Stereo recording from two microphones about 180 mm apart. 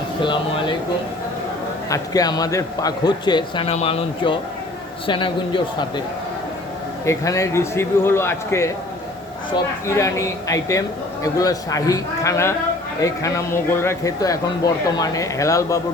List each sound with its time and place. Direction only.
1.9 s speech: 20° left (ahead or behind)
7.0 s a man's voice: 15° left (ahead or behind)
9.8 s a man's voice: 15° left (ahead or behind)